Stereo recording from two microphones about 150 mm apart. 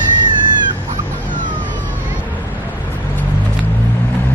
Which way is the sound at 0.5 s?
30° right (ahead or behind).